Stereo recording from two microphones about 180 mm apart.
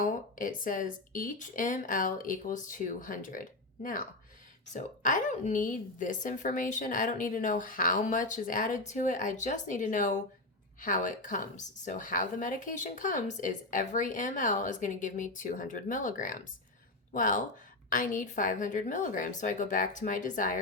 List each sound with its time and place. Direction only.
0.0 s a woman's voice: 50° left (ahead or behind)